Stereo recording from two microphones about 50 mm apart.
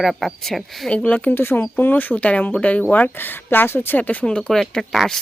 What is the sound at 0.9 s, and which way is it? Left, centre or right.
Speech, left.